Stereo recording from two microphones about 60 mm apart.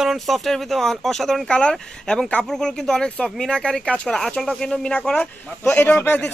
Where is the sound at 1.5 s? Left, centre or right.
Centre.